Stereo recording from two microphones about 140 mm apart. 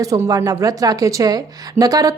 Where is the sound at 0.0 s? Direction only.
25° right (ahead or behind).